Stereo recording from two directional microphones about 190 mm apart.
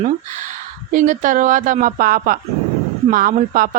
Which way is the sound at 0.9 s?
40° right (ahead or behind).